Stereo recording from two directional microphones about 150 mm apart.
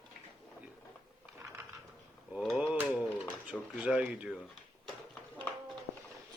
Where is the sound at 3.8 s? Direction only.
5° right (ahead or behind).